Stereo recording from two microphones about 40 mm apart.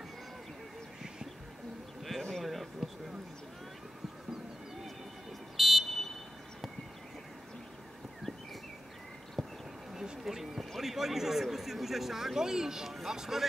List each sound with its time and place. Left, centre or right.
2.0 s a sound: centre
5.6 s buzzer: centre
10.2 s speech: centre